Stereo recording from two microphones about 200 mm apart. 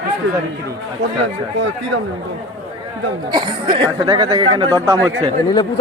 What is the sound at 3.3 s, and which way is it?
Speech, 25° right (ahead or behind).